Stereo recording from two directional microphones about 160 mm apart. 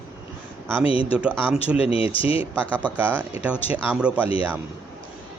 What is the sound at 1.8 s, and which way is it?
Speech, 35° left (ahead or behind).